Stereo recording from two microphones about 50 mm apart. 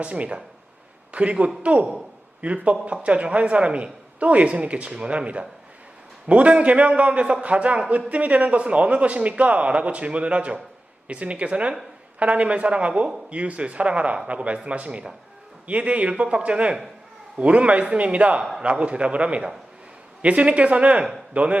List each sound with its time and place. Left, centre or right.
0.0 s a man's voice: right